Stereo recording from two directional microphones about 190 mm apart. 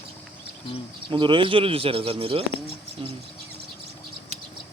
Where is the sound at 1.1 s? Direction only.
25° right (ahead or behind).